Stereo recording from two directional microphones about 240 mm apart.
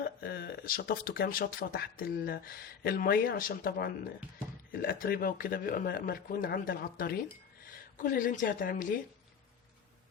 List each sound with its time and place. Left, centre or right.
0.0 s speech: left